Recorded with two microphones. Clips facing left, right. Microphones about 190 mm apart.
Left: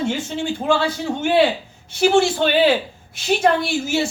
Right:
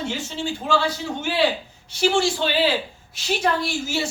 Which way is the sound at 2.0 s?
55° left (ahead or behind).